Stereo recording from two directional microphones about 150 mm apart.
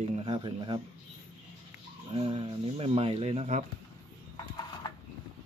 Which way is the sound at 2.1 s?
40° right (ahead or behind).